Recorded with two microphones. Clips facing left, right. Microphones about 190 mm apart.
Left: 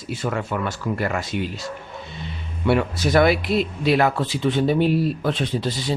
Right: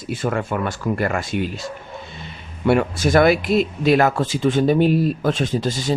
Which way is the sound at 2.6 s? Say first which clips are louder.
Right 3 dB; 50° right (ahead or behind).